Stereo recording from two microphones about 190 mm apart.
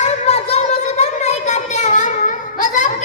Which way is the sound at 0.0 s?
30° left (ahead or behind).